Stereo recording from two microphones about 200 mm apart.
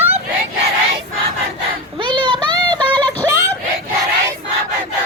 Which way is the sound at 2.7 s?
20° right (ahead or behind).